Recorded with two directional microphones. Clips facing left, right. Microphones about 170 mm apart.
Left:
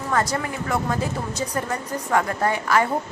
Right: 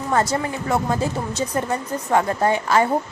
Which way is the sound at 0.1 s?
25° right (ahead or behind).